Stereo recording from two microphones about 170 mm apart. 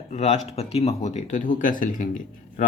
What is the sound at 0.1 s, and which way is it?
Speech, 40° left (ahead or behind).